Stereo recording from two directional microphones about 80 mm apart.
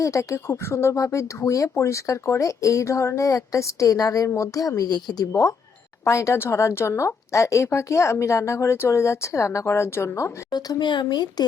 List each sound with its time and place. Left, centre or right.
0.0 s a woman's voice: left
5.3 s a woman's voice: left
10.5 s speech: left